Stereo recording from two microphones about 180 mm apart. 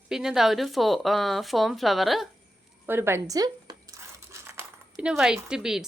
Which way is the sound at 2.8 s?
10° right (ahead or behind).